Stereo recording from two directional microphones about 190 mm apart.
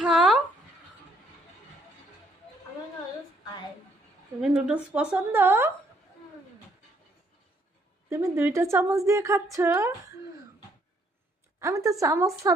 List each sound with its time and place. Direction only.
0.0 s a sound: centre (ahead or behind)
4.4 s a woman's voice: 5° right (ahead or behind)
8.1 s a woman's voice: 15° right (ahead or behind)
11.6 s a woman's voice: 15° right (ahead or behind)